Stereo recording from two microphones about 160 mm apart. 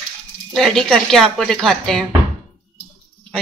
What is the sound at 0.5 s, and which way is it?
Speech, 5° left (ahead or behind).